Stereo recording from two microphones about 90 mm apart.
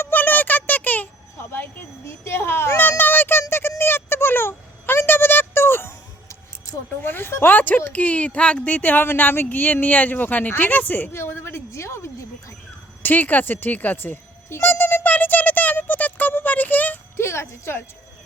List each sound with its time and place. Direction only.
0.0 s a sound: 20° left (ahead or behind)
7.0 s speech: 25° left (ahead or behind)
13.0 s music: 20° left (ahead or behind)
17.2 s speech: 30° left (ahead or behind)